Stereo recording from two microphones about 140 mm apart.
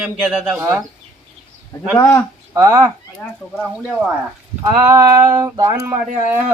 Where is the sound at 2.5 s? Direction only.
25° right (ahead or behind).